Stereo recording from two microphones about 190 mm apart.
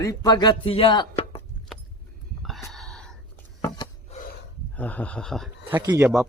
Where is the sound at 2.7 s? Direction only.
Centre (ahead or behind).